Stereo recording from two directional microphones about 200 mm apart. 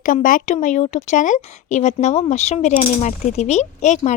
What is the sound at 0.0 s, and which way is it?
Speech, 40° left (ahead or behind).